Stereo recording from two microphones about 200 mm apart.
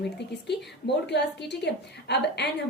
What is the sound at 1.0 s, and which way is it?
A woman's voice, 60° left (ahead or behind).